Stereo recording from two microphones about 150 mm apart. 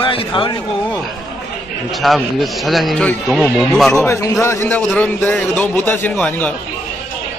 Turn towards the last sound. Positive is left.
turn(degrees=10)  # may be behind; listen again after turning